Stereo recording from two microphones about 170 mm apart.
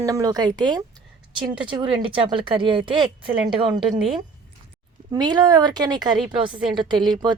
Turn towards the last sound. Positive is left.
turn(degrees=-25)  # may be behind; listen again after turning